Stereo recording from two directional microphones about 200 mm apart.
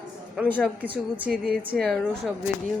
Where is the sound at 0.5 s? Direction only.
10° left (ahead or behind).